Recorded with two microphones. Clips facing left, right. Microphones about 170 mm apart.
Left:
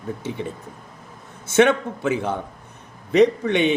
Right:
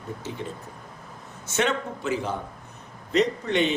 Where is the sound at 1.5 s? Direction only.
60° left (ahead or behind).